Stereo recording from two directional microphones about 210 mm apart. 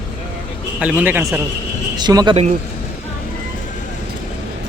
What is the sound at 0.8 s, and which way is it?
Speech, 5° right (ahead or behind).